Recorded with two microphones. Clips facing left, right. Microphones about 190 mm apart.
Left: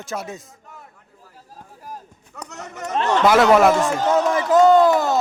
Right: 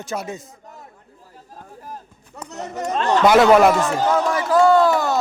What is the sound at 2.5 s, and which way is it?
Speech, 35° right (ahead or behind).